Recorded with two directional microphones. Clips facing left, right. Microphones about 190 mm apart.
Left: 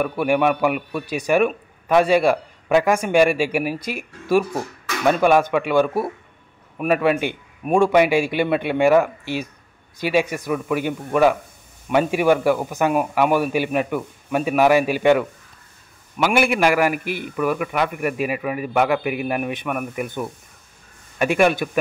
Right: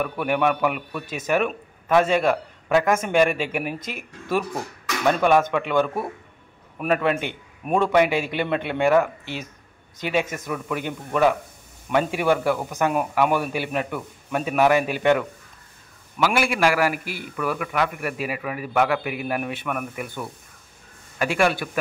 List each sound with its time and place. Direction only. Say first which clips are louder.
0.0 s a man's voice: left 4 dB; 10° left (ahead or behind)